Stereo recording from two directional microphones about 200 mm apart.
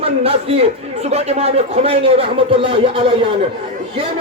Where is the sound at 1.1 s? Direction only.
30° right (ahead or behind).